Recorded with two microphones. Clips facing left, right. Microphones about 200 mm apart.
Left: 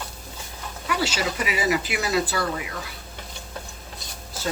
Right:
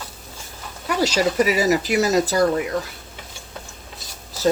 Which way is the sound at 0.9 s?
40° right (ahead or behind).